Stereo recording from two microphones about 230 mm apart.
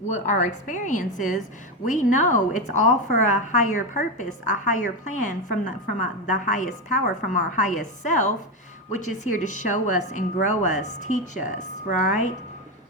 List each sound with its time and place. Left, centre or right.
0.1 s a woman's voice: left